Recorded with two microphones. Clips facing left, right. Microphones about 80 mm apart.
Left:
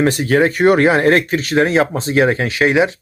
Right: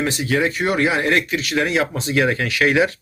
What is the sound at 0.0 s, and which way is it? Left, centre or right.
Speech, left.